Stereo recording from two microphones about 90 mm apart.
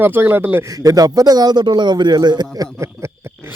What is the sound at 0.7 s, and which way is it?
A man's voice, 40° right (ahead or behind).